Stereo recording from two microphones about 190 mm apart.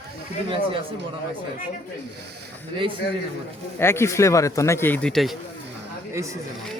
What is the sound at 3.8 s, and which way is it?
Speech, 15° left (ahead or behind).